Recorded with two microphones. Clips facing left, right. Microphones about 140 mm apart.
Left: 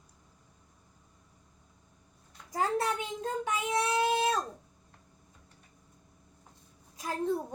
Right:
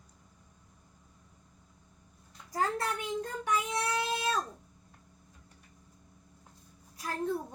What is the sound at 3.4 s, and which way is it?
Speech, 20° left (ahead or behind).